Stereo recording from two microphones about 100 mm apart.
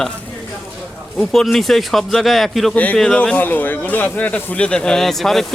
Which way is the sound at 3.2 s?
15° left (ahead or behind).